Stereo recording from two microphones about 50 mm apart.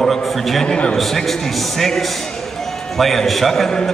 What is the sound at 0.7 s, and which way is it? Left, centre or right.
Speech, centre.